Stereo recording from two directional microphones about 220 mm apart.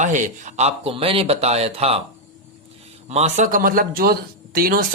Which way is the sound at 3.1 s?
30° right (ahead or behind).